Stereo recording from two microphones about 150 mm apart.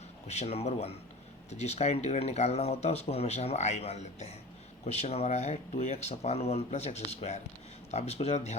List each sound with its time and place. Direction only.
0.3 s speech: 45° left (ahead or behind)